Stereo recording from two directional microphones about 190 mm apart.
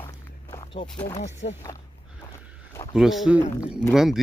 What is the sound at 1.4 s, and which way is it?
Speech, 60° left (ahead or behind).